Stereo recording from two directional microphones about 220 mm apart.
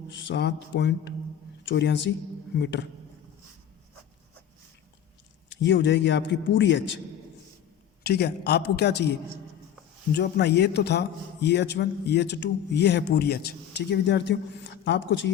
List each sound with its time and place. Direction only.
0.1 s a man's voice: 55° left (ahead or behind)
5.5 s a man's voice: 55° left (ahead or behind)
8.0 s a man's voice: 45° left (ahead or behind)
10.2 s a man's voice: 50° left (ahead or behind)